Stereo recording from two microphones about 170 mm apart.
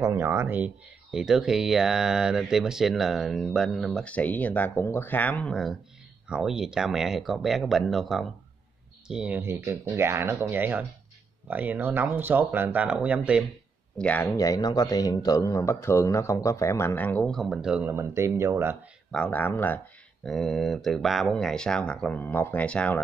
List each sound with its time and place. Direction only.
0.0 s speech: 15° right (ahead or behind)
13.9 s a man's voice: 10° left (ahead or behind)
14.3 s a man's voice: 20° left (ahead or behind); by 18.8 s 15° right (ahead or behind)
19.1 s a man's voice: 10° left (ahead or behind)